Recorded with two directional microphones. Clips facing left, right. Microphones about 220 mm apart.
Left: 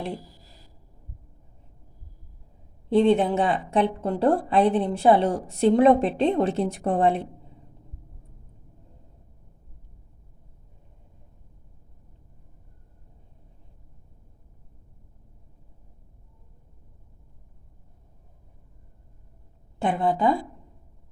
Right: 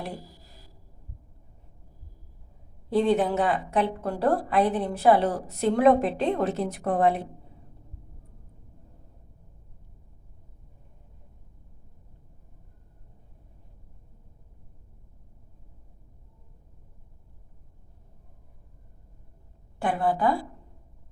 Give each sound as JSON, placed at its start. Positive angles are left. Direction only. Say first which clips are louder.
{"t": 2.9, "sound": "a woman's voice", "louder": "left 3 dB", "side_deg": 25}
{"t": 19.8, "sound": "a woman's voice", "louder": "left 2 dB", "side_deg": 25}